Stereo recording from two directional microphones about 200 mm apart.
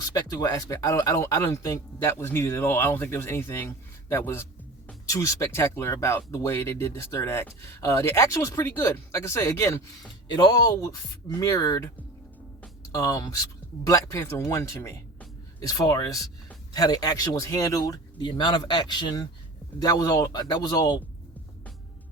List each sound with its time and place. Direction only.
0.0 s speech: 20° left (ahead or behind)
12.9 s speech: 15° left (ahead or behind)